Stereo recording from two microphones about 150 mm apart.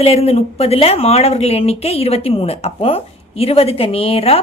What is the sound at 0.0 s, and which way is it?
A woman's voice, 45° left (ahead or behind).